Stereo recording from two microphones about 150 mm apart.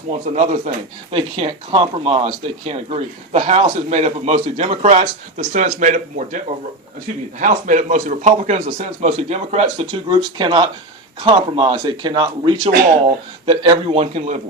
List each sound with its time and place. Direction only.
0.3 s speech: 50° right (ahead or behind)
1.1 s speech: 35° right (ahead or behind)
9.8 s speech: 30° right (ahead or behind); by 14.4 s 50° right (ahead or behind)